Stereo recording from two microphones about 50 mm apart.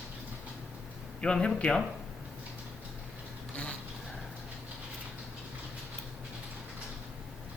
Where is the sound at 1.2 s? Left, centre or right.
Centre.